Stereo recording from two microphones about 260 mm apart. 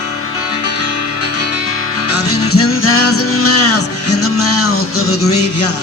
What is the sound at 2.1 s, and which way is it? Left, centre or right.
Music, left.